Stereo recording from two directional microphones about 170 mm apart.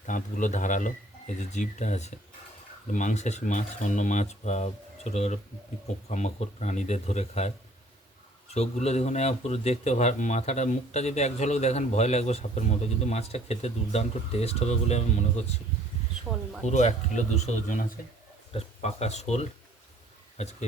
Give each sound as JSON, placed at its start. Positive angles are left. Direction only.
{"t": 0.0, "sound": "speech", "side_deg": 50}
{"t": 16.6, "sound": "speech", "side_deg": 45}
{"t": 18.5, "sound": "speech", "side_deg": 40}